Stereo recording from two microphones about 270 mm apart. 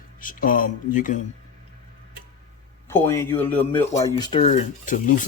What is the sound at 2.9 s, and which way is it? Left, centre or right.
A man's voice, centre.